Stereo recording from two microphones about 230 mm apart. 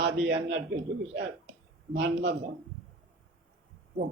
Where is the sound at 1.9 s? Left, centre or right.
Right.